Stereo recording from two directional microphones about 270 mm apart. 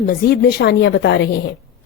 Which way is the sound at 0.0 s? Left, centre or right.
Left.